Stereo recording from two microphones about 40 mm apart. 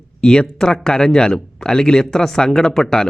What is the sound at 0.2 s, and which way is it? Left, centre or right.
Speech, centre.